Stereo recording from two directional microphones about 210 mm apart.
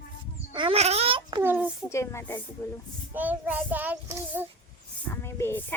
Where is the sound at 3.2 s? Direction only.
10° right (ahead or behind).